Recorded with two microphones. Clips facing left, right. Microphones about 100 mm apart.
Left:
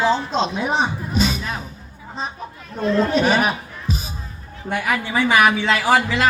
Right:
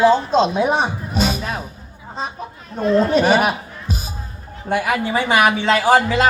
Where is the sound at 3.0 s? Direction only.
45° right (ahead or behind).